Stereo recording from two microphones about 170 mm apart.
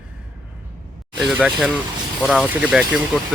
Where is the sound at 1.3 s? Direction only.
5° right (ahead or behind).